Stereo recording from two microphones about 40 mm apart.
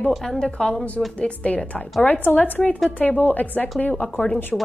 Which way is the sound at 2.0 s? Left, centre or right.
Left.